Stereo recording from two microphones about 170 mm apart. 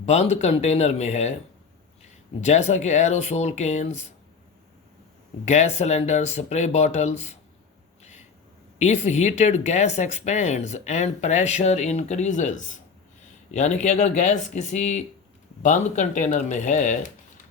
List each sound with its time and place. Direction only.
0.0 s speech: 40° left (ahead or behind)
2.4 s speech: 40° left (ahead or behind)
5.5 s speech: 40° left (ahead or behind)
8.8 s speech: 40° left (ahead or behind)